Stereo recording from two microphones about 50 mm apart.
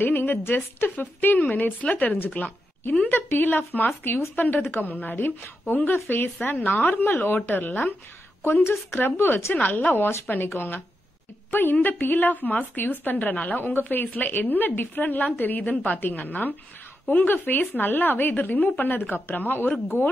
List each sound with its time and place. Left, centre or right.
0.0 s a woman's voice: left
9.5 s a woman's voice: left
10.5 s a woman's voice: left
11.8 s a woman's voice: left
13.6 s a woman's voice: left